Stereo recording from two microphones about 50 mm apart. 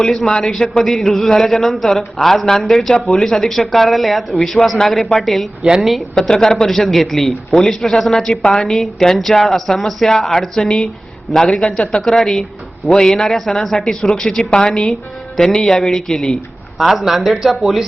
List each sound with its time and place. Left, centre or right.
0.0 s a man's voice: centre
8.3 s a woman's voice: left
8.5 s a man's voice: centre